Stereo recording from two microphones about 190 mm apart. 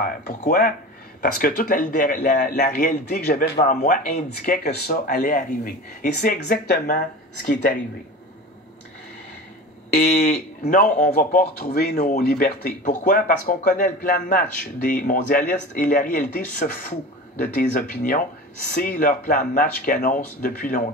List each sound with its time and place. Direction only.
0.5 s speech: 50° left (ahead or behind)
10.1 s speech: 40° left (ahead or behind)